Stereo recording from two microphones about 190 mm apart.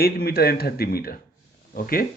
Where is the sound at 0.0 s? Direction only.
55° left (ahead or behind).